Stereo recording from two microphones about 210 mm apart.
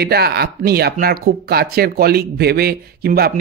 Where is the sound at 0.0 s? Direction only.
50° right (ahead or behind).